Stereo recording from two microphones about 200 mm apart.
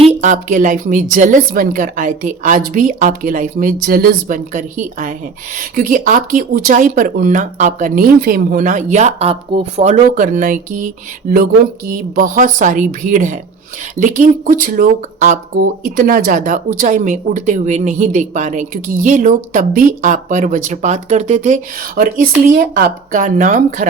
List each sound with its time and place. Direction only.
0.0 s a woman's voice: 40° right (ahead or behind)
11.9 s speech: 45° right (ahead or behind)